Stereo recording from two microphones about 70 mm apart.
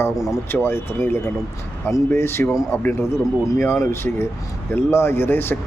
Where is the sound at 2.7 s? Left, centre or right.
Left.